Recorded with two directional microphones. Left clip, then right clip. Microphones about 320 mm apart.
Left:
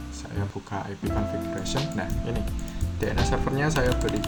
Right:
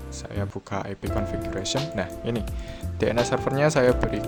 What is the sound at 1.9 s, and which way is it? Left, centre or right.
Speech, right.